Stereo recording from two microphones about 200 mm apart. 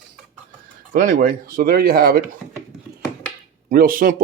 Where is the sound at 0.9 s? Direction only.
40° right (ahead or behind).